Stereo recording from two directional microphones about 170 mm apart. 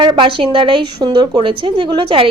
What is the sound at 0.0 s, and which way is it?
A woman's voice, 30° right (ahead or behind).